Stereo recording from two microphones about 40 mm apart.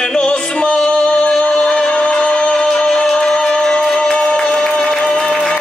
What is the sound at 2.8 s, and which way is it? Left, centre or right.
Music, centre.